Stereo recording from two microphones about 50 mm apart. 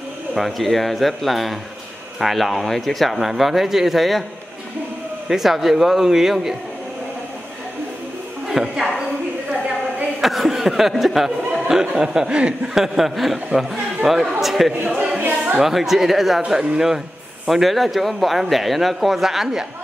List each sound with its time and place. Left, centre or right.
0.3 s speech: centre
5.3 s speech: centre
8.5 s speech: centre
10.2 s speech: centre; by 12.5 s right
12.6 s a man's voice: centre
15.0 s a sound: right
15.6 s speech: centre